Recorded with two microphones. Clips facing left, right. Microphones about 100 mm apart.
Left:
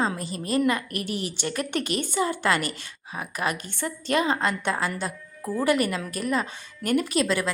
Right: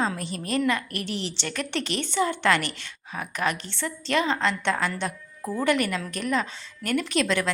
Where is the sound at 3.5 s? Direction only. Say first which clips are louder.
Left 1 dB; 50° left (ahead or behind).